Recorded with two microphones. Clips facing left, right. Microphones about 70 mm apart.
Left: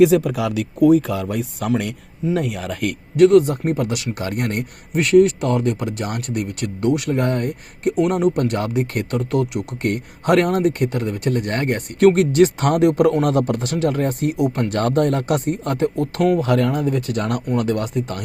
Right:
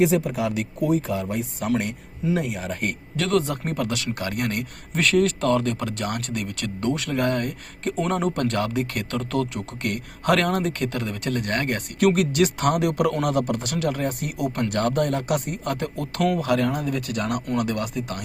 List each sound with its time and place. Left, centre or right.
0.0 s speech: left
2.3 s speech: left
3.2 s speech: centre
4.9 s speech: centre
7.1 s speech: left
7.9 s speech: centre
8.4 s speech: centre
9.3 s speech: centre
9.8 s speech: left
13.2 s speech: left
14.3 s speech: left
14.6 s speech: left
16.0 s speech: left
16.4 s speech: left